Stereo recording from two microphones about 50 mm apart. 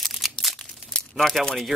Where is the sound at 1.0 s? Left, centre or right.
Centre.